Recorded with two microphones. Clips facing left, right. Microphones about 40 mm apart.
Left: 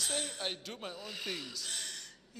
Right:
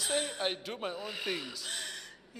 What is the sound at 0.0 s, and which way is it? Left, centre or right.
Speech, centre.